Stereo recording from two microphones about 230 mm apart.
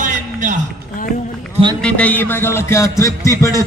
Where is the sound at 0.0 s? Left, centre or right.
Right.